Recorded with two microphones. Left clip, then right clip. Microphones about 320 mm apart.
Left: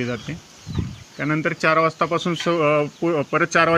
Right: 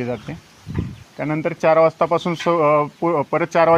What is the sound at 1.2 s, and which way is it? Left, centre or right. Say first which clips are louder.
Speech: right 1 dB; centre.